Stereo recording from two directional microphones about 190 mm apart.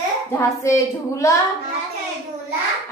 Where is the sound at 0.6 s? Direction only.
15° left (ahead or behind).